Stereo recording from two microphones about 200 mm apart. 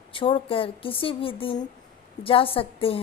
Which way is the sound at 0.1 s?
25° left (ahead or behind).